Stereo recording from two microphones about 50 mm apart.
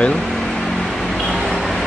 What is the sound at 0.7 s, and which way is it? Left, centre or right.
Microwave oven, centre.